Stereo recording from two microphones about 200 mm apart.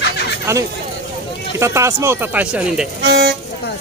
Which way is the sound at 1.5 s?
15° right (ahead or behind).